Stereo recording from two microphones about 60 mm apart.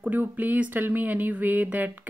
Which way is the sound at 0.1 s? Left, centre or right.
Right.